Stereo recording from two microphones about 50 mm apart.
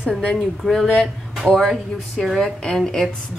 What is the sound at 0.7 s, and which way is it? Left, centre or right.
A woman's voice, centre.